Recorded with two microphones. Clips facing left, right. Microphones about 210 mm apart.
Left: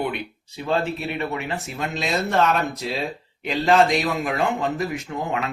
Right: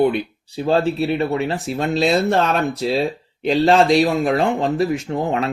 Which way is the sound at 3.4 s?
35° right (ahead or behind).